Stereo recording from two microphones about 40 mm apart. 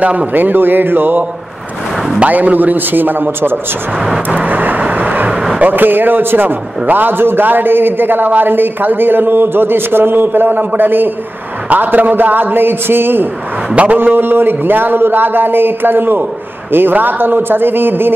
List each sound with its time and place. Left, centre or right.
0.0 s speech: right
0.3 s a man's voice: right
2.1 s a man's voice: right
4.0 s vehicle: centre
4.4 s vehicle: right
5.6 s a man's voice: right
11.7 s a man's voice: right